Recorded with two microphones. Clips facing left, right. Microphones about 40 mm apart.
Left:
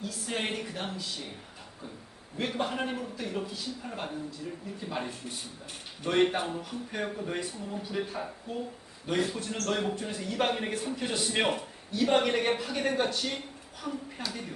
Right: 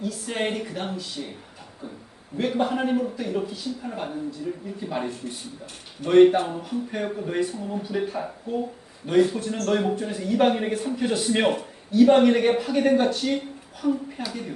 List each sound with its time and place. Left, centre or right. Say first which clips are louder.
0.0 s speech: right 6 dB; centre
2.4 s speech: right 7 dB; centre